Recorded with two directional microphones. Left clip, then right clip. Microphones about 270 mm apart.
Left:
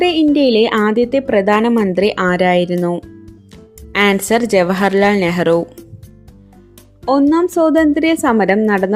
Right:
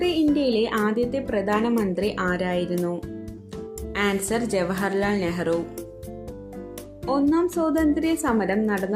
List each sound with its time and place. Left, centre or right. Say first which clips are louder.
0.0 s a woman's voice: left 9 dB; left
3.9 s a woman's voice: left 11 dB; left
7.0 s a woman's voice: left 9 dB; left